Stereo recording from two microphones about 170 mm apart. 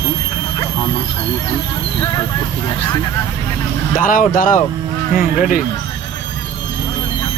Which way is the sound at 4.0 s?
50° left (ahead or behind).